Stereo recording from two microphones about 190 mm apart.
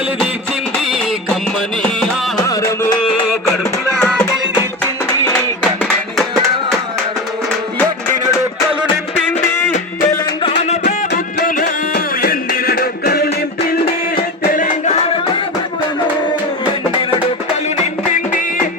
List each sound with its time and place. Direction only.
0.9 s music: centre (ahead or behind)
2.5 s music: 15° left (ahead or behind)
10.4 s music: 35° left (ahead or behind)